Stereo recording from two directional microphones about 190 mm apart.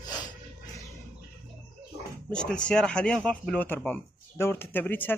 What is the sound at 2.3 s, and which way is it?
Speech, 5° left (ahead or behind).